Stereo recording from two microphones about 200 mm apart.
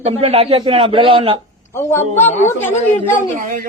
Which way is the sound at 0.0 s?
30° right (ahead or behind).